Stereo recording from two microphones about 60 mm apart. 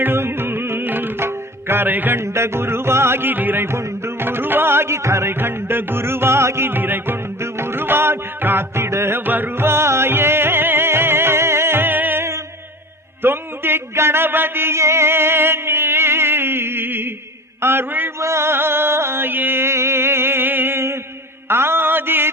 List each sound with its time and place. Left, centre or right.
0.0 s music: right
2.1 s music: right
5.3 s music: right
6.7 s music: right
13.2 s a sound: right
17.6 s music: right
18.2 s music: right
21.5 s mantra: right